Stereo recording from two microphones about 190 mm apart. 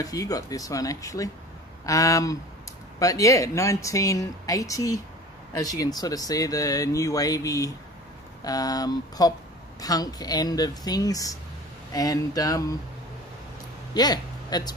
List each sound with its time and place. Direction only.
0.0 s speech: 20° left (ahead or behind)
13.9 s speech: 20° left (ahead or behind)